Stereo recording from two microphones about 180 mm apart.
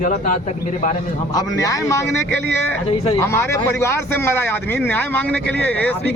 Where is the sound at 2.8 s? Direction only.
35° left (ahead or behind).